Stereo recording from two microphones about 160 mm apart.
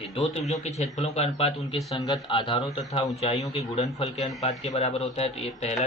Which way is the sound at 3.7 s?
45° left (ahead or behind).